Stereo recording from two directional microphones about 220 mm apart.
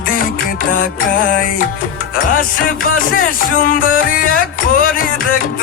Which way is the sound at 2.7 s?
40° left (ahead or behind).